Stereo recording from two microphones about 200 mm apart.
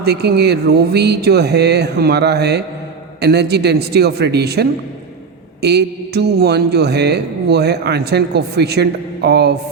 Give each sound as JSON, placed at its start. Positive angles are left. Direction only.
{"t": 0.0, "sound": "a man's voice", "side_deg": -55}